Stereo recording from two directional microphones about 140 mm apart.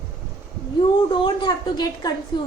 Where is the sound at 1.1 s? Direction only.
35° left (ahead or behind).